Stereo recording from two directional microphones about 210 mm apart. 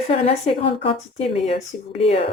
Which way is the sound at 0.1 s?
30° left (ahead or behind).